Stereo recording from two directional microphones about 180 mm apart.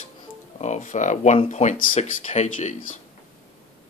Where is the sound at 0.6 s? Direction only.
40° left (ahead or behind).